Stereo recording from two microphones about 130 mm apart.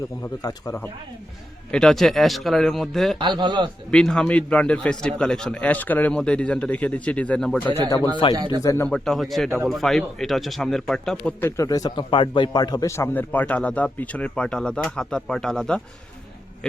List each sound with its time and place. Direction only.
0.2 s speech: 25° left (ahead or behind)
1.7 s speech: 5° left (ahead or behind)
3.2 s speech: 35° right (ahead or behind)
3.9 s a man's voice: 5° left (ahead or behind)
7.7 s speech: 25° left (ahead or behind)
8.9 s a man's voice: centre (ahead or behind)